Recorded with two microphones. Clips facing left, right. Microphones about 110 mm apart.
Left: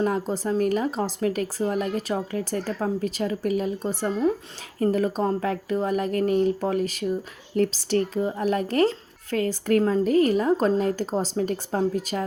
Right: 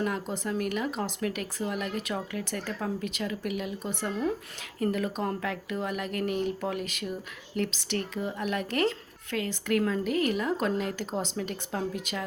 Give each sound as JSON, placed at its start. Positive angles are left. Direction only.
{"t": 0.0, "sound": "speech", "side_deg": 35}